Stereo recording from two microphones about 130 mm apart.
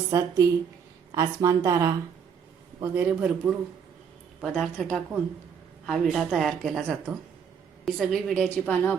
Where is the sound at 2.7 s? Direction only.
15° right (ahead or behind).